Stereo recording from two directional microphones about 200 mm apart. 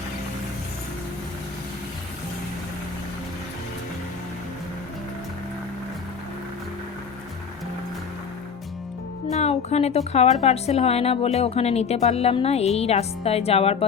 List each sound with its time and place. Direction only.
9.2 s speech: 35° left (ahead or behind)